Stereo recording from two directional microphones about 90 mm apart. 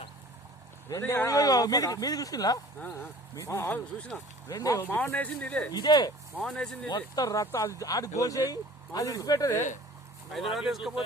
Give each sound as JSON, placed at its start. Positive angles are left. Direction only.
{"t": 0.9, "sound": "speech", "side_deg": 35}
{"t": 3.3, "sound": "speech", "side_deg": 35}
{"t": 3.9, "sound": "speech", "side_deg": 15}
{"t": 4.4, "sound": "speech", "side_deg": 40}
{"t": 5.1, "sound": "speech", "side_deg": 15}
{"t": 5.7, "sound": "speech", "side_deg": 50}
{"t": 6.4, "sound": "speech", "side_deg": 5}
{"t": 6.8, "sound": "speech", "side_deg": 45}
{"t": 10.5, "sound": "speech", "side_deg": -5}